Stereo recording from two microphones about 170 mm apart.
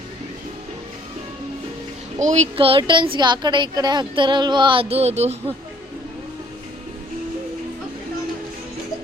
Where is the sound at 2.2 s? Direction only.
45° right (ahead or behind).